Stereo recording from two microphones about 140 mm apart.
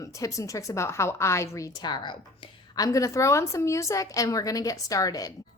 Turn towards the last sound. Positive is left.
turn(degrees=25)  # may be behind; listen again after turning